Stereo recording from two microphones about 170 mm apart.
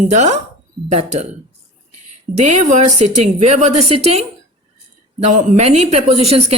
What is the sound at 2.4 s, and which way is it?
Speech, 45° right (ahead or behind).